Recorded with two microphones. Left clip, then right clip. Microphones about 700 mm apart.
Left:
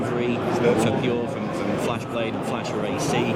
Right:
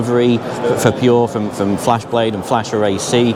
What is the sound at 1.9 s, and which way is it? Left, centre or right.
Speech, right.